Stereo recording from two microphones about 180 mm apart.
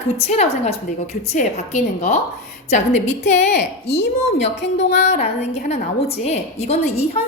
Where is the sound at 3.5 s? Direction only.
70° left (ahead or behind).